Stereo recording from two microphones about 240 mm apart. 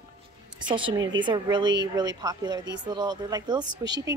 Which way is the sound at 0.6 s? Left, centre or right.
Centre.